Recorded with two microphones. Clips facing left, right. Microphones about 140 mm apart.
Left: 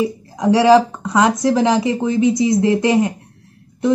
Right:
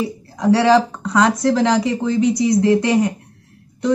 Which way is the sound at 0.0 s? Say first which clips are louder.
Left 2 dB; 20° left (ahead or behind).